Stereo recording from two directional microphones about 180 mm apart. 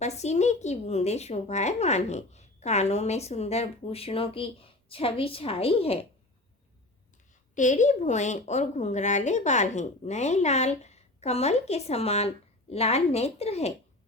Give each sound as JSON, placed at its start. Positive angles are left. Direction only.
{"t": 0.0, "sound": "a woman's voice", "side_deg": 40}
{"t": 7.5, "sound": "a woman's voice", "side_deg": 45}